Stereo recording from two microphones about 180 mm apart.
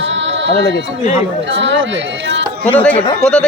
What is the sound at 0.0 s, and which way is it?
Music, 90° right.